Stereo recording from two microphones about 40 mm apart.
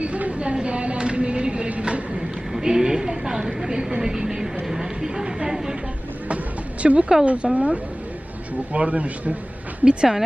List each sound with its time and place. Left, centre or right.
0.0 s a sound: right
2.5 s a woman's voice: centre
6.8 s speech: right
9.8 s speech: right